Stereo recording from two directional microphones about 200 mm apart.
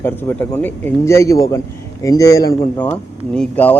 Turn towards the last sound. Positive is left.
turn(degrees=5)  # may be behind; listen again after turning